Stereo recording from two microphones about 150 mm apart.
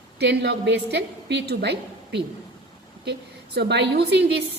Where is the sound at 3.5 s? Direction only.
90° right.